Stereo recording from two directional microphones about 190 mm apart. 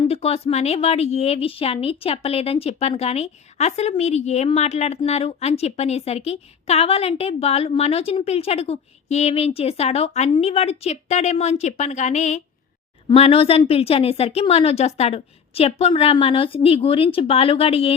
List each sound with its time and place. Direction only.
0.0 s a woman's voice: 35° left (ahead or behind)